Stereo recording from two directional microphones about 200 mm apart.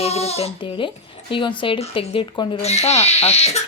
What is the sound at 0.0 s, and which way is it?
Speech, 30° left (ahead or behind).